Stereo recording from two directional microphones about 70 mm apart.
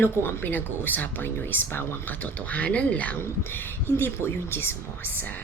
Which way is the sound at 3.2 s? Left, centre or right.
Left.